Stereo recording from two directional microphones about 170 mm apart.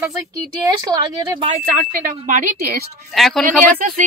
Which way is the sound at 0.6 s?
20° right (ahead or behind).